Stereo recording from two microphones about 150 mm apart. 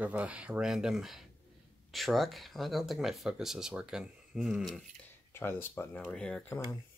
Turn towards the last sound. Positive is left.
turn(degrees=5)  # may be behind; listen again after turning